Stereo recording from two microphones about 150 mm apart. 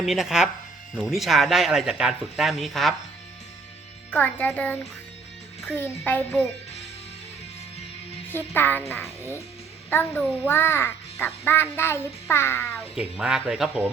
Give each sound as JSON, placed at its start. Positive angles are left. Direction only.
{"t": 0.0, "sound": "speech", "side_deg": 0}
{"t": 4.1, "sound": "a child's voice", "side_deg": 10}
{"t": 8.3, "sound": "a child's voice", "side_deg": 15}
{"t": 13.0, "sound": "speech", "side_deg": -5}